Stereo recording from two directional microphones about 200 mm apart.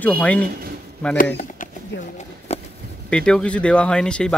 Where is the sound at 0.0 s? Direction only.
5° left (ahead or behind).